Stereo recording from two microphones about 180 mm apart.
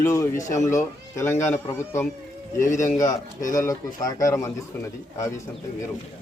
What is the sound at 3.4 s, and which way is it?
Speech, 45° left (ahead or behind).